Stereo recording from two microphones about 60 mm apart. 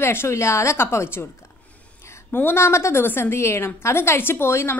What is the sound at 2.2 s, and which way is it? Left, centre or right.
Speech, left.